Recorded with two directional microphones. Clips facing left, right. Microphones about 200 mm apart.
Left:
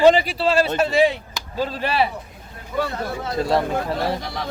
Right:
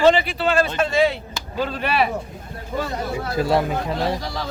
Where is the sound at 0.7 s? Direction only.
10° left (ahead or behind).